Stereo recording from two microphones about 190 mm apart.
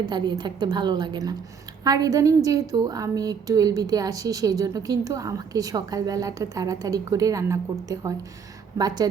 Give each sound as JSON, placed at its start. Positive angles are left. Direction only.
{"t": 0.0, "sound": "a woman's voice", "side_deg": -25}